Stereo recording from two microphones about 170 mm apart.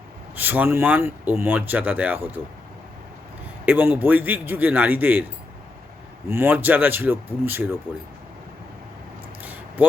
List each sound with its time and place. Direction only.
0.3 s speech: 10° right (ahead or behind)
3.7 s speech: 10° right (ahead or behind)
6.2 s speech: 15° right (ahead or behind)
9.4 s vehicle: 10° right (ahead or behind)